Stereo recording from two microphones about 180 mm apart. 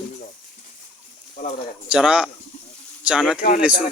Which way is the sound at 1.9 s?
5° right (ahead or behind).